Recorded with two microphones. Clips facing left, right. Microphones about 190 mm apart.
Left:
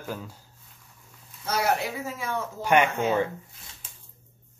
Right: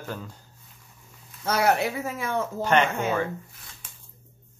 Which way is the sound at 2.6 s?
10° left (ahead or behind).